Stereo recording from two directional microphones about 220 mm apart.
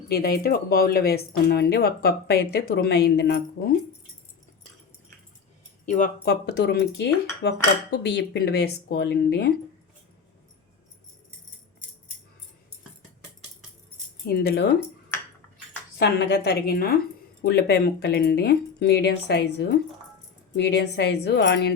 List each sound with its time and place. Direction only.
0.1 s speech: 45° left (ahead or behind)
5.8 s speech: 35° left (ahead or behind)
6.2 s speech: 50° left (ahead or behind)
14.3 s speech: 45° left (ahead or behind)
16.0 s speech: 50° left (ahead or behind)